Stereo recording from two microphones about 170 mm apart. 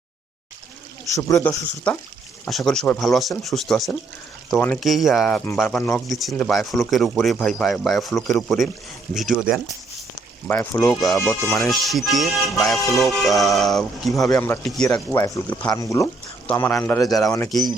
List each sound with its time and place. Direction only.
1.1 s speech: 15° left (ahead or behind)
2.4 s speech: centre (ahead or behind)
6.1 s speech: centre (ahead or behind)
10.5 s speech: 10° left (ahead or behind)
11.0 s speech: centre (ahead or behind)
14.3 s speech: 15° left (ahead or behind)
17.5 s speech: centre (ahead or behind)